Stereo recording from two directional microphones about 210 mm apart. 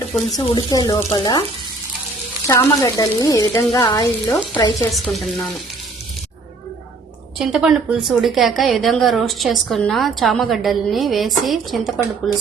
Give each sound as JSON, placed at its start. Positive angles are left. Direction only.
{"t": 0.3, "sound": "speech", "side_deg": 20}
{"t": 2.5, "sound": "speech", "side_deg": 15}
{"t": 4.9, "sound": "a woman's voice", "side_deg": 0}
{"t": 7.3, "sound": "a woman's voice", "side_deg": -5}